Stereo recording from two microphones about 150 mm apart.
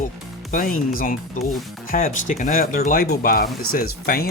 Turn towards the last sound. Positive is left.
turn(degrees=90)